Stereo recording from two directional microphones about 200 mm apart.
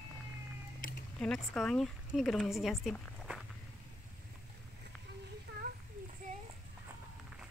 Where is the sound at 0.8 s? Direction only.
40° left (ahead or behind).